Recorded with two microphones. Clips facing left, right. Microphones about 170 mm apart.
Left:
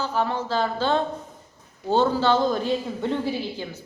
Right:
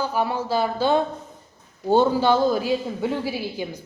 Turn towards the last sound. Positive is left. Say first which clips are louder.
# right 1 dB
turn(degrees=-10)  # may be behind; listen again after turning